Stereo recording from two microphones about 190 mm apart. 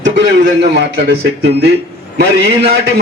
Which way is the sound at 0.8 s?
60° right (ahead or behind).